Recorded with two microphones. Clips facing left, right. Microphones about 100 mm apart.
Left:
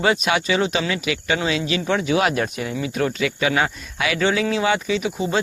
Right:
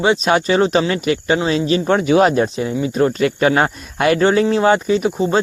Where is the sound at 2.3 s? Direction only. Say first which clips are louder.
Right 6 dB; 25° right (ahead or behind).